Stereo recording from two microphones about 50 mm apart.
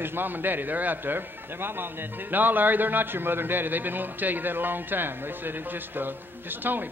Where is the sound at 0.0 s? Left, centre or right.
Right.